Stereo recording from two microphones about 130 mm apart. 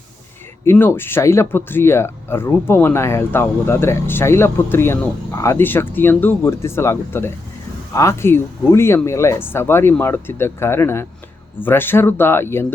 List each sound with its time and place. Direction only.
0.6 s speech: 20° left (ahead or behind)